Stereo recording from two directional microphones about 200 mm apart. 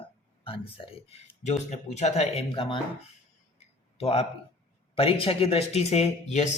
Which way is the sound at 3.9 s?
30° left (ahead or behind).